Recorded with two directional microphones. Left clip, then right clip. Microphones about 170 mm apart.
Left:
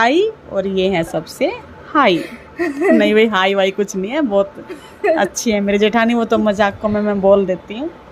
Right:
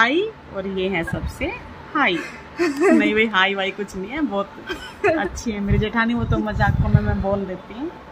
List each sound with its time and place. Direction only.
0.0 s a woman's voice: 65° left (ahead or behind)
2.2 s a woman's voice: centre (ahead or behind)
3.0 s a woman's voice: 65° left (ahead or behind)